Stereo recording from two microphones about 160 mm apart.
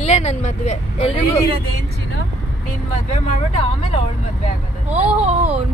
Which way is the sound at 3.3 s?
40° left (ahead or behind).